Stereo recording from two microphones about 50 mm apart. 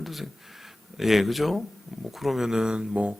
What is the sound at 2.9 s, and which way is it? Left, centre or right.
Speech, right.